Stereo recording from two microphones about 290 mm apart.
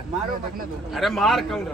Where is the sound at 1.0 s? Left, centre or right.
Centre.